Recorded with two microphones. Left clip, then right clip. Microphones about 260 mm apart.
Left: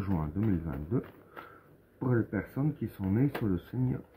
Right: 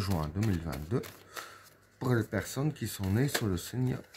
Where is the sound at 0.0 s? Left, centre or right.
Right.